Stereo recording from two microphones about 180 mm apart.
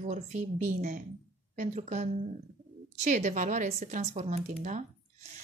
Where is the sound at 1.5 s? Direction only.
40° right (ahead or behind).